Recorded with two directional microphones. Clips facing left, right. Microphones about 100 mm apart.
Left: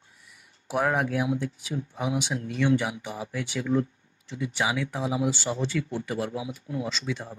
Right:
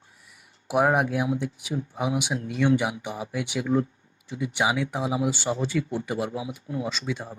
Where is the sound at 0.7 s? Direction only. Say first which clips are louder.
Right 3 dB; 15° right (ahead or behind).